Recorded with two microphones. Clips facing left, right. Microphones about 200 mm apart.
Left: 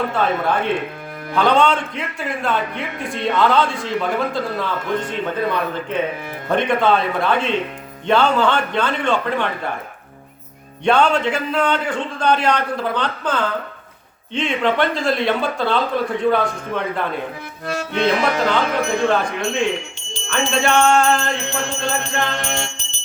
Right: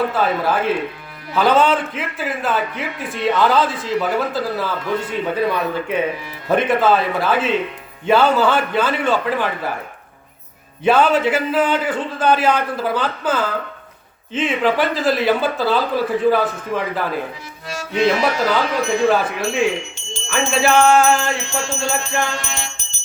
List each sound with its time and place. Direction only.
0.1 s a man's voice: 5° right (ahead or behind)
10.8 s a man's voice: 5° right (ahead or behind)
19.0 s music: 5° right (ahead or behind)
22.4 s music: 50° left (ahead or behind)